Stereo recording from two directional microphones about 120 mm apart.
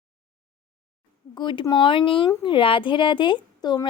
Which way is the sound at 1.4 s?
40° left (ahead or behind).